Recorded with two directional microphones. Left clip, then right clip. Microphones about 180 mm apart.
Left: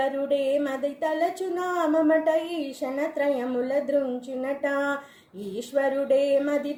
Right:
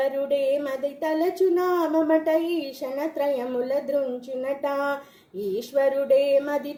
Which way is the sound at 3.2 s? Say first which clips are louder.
Right 1 dB; 35° right (ahead or behind).